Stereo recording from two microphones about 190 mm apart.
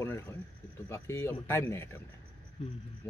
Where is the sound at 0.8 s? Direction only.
15° left (ahead or behind).